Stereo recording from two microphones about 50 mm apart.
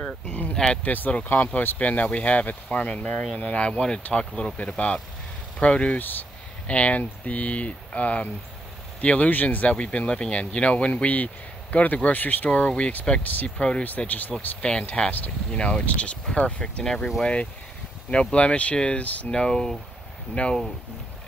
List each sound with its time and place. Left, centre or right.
0.3 s a sound: left
0.8 s speech: left
5.9 s speech: left
6.7 s speech: left
12.4 s speech: left
13.2 s speech: left
13.6 s speech: left
13.8 s speech: left
14.6 s speech: centre
15.0 s speech: left
15.5 s speech: left
18.1 s speech: left
20.4 s speech: left